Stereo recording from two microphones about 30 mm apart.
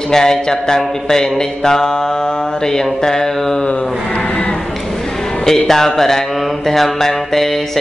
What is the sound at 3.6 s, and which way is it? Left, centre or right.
Mantra, left.